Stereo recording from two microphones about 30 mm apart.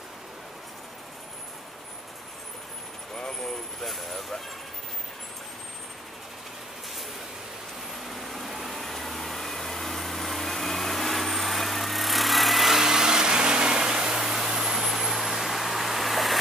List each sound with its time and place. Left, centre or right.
3.2 s vehicle: left
3.8 s speech: centre
8.1 s vehicle: centre
12.7 s vehicle: centre